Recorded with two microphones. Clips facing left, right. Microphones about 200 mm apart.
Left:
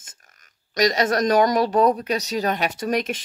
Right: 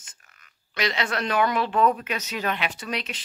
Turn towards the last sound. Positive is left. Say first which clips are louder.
# left 8 dB
turn(degrees=45)  # may be behind; listen again after turning